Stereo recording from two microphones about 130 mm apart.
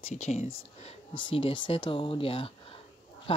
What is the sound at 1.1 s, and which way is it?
Speech, 40° left (ahead or behind).